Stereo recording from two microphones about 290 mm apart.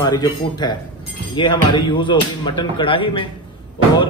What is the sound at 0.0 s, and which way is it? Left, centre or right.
Speech, centre.